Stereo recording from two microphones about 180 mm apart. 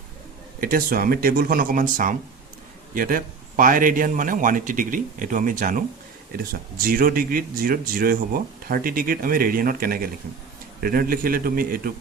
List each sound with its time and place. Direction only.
0.6 s a man's voice: 50° right (ahead or behind)